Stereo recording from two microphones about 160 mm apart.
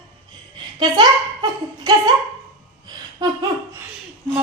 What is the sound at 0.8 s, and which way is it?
A child's voice, 30° right (ahead or behind).